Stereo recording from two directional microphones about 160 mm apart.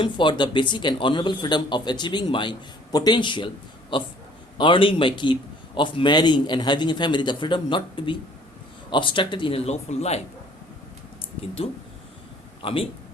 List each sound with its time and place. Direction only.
0.0 s a man's voice: 30° left (ahead or behind)
12.6 s speech: 35° left (ahead or behind)